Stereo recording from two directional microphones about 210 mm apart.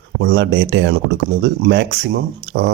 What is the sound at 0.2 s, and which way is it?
Speech, 55° right (ahead or behind).